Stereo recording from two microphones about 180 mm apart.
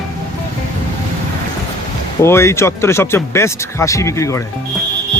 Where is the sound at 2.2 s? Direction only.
15° left (ahead or behind).